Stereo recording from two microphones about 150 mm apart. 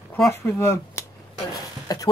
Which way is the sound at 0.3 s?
15° left (ahead or behind).